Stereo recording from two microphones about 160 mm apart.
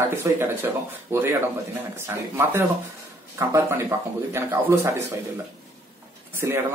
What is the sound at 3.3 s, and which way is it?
Speech, 15° right (ahead or behind).